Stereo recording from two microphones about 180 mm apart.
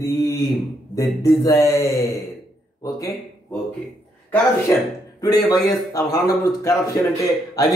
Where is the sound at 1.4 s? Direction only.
20° left (ahead or behind).